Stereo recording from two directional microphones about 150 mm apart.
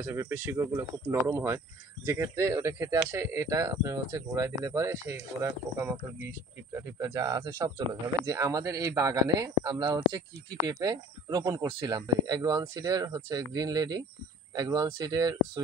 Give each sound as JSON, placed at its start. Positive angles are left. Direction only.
{"t": 0.0, "sound": "speech", "side_deg": -20}